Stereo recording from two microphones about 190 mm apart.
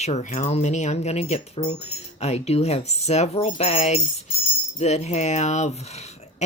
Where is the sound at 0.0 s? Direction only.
35° left (ahead or behind).